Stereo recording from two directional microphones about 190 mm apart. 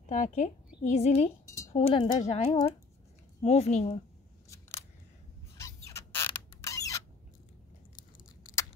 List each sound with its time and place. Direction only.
0.1 s speech: 40° left (ahead or behind)
4.5 s scissors: 15° left (ahead or behind)
5.9 s creak: 15° left (ahead or behind)